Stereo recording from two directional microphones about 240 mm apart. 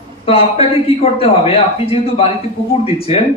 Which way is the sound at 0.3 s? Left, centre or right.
Left.